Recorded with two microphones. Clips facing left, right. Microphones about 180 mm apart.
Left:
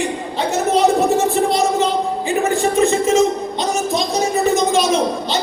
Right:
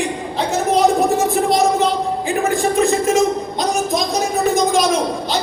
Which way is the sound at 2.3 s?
Centre (ahead or behind).